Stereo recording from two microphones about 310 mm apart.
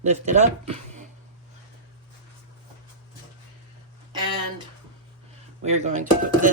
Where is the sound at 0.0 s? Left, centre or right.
Right.